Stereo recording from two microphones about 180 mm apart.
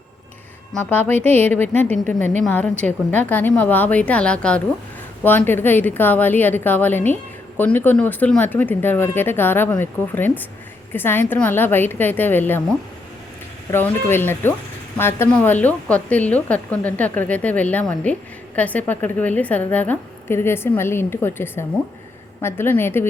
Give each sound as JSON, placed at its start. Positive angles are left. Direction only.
{"t": 0.7, "sound": "a woman's voice", "side_deg": 10}
{"t": 13.7, "sound": "a woman's voice", "side_deg": 10}